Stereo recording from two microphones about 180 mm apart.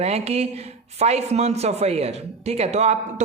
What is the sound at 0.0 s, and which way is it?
Speech, 35° right (ahead or behind).